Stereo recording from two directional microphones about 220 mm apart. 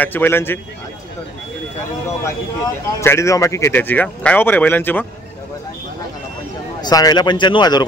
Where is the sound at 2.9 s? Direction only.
15° left (ahead or behind).